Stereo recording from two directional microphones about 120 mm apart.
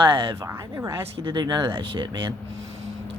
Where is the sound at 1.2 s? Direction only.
40° right (ahead or behind).